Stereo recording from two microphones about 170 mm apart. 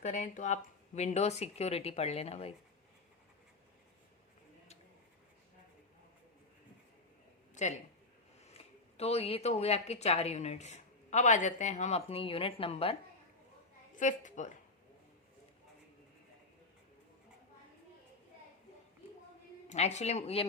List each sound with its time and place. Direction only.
0.0 s speech: 45° left (ahead or behind)
7.5 s speech: 45° left (ahead or behind)
13.9 s a woman's voice: 45° left (ahead or behind)
19.6 s speech: 40° left (ahead or behind)